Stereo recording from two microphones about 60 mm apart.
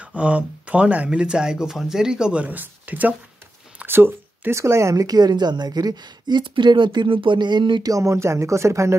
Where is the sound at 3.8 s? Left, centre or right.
Right.